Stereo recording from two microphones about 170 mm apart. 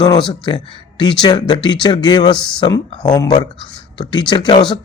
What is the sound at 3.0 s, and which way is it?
Speech, 25° left (ahead or behind).